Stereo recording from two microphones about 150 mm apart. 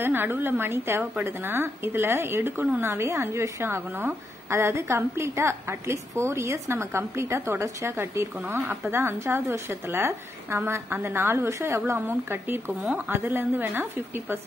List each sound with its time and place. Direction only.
0.0 s a woman's voice: 15° right (ahead or behind)